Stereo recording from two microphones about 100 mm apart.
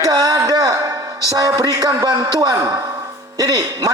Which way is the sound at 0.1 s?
40° right (ahead or behind).